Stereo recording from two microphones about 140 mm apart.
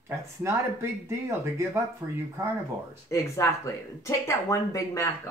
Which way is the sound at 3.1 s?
20° left (ahead or behind).